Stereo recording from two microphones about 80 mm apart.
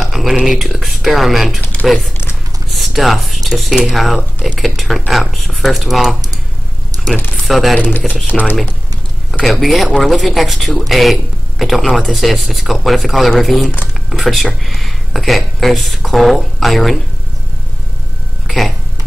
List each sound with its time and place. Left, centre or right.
0.0 s speech: centre
1.8 s typing: left
2.7 s speech: centre
7.4 s speech: centre
8.3 s speech: left
9.3 s speech: centre